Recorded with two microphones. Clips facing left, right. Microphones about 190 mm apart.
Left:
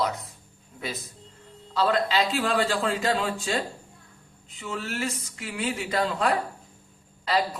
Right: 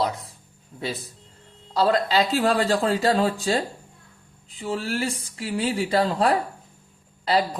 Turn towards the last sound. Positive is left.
turn(degrees=-30)  # may be behind; listen again after turning